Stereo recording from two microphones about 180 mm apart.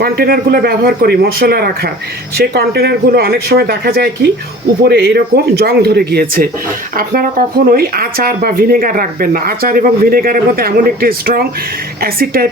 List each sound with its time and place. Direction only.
0.0 s speech: 60° right (ahead or behind)